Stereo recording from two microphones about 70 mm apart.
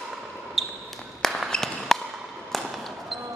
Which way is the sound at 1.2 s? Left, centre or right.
Centre.